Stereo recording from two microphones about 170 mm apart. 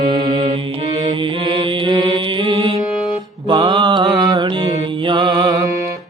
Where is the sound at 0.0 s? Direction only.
25° right (ahead or behind).